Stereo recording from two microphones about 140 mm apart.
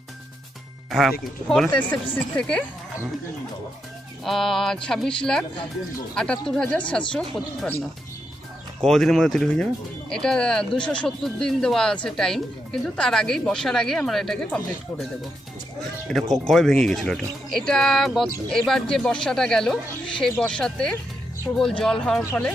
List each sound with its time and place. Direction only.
0.8 s music: centre (ahead or behind)
1.8 s speech: 10° left (ahead or behind)
4.2 s speech: centre (ahead or behind)
8.8 s speech: centre (ahead or behind)
16.1 s speech: centre (ahead or behind)